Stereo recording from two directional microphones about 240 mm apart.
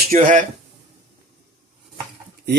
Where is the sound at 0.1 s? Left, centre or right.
Right.